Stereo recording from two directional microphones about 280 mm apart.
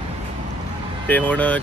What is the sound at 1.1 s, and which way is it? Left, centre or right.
Speech, centre.